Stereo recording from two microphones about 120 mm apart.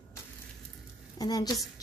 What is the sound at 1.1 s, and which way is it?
Speech, 30° left (ahead or behind).